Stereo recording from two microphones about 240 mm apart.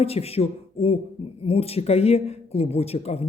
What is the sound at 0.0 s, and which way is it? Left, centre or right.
Speech, left.